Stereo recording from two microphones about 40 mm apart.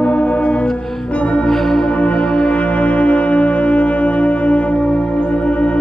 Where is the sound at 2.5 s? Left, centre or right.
Left.